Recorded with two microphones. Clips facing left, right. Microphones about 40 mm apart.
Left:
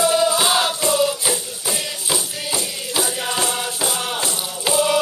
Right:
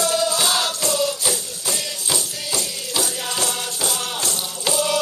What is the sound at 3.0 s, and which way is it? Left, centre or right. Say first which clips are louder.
Music: left 3 dB; centre.